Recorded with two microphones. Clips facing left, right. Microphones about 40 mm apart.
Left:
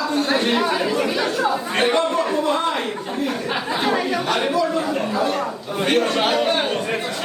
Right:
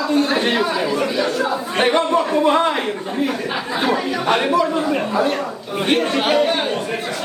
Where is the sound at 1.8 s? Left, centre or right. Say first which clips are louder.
Right 4 dB; right.